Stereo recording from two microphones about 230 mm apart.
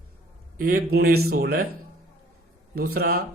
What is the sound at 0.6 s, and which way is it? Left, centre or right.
Speech, right.